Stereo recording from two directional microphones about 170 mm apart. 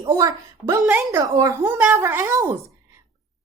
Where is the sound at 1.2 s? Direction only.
20° right (ahead or behind).